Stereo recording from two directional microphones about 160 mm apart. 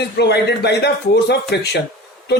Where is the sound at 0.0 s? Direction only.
90° left.